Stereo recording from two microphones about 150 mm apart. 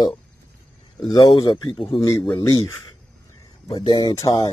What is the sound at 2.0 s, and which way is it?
Speech, 20° left (ahead or behind).